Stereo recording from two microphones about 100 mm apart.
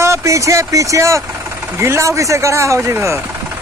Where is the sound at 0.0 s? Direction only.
30° right (ahead or behind).